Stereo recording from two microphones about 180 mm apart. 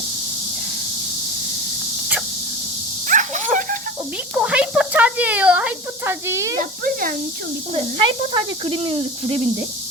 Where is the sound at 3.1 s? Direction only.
45° right (ahead or behind).